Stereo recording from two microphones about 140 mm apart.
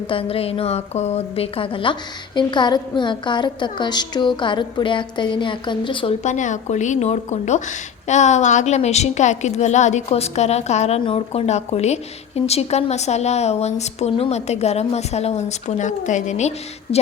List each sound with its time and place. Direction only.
0.1 s a woman's voice: 40° left (ahead or behind)
6.2 s a woman's voice: 60° left (ahead or behind)